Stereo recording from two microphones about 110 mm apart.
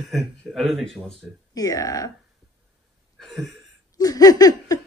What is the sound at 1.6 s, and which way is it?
Speech, 35° left (ahead or behind).